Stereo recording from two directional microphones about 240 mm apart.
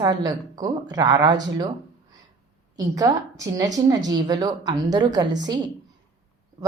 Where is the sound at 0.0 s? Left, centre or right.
Centre.